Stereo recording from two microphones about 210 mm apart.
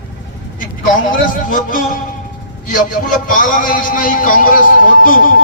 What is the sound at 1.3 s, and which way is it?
A man's voice, 40° left (ahead or behind).